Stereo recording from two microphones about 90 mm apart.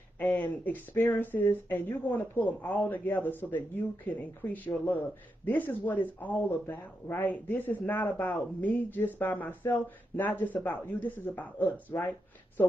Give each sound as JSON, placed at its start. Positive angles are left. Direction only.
{"t": 0.2, "sound": "speech", "side_deg": 20}